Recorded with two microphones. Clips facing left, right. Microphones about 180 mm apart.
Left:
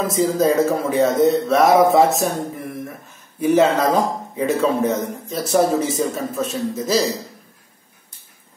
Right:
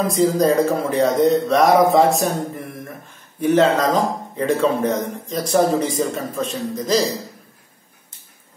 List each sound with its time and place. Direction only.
0.0 s speech: 5° left (ahead or behind)
3.3 s a man's voice: 10° left (ahead or behind)